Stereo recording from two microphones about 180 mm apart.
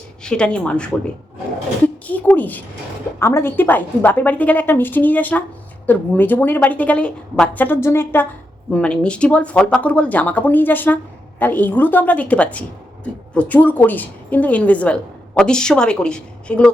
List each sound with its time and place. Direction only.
0.2 s speech: 5° left (ahead or behind)
2.0 s speech: 10° left (ahead or behind)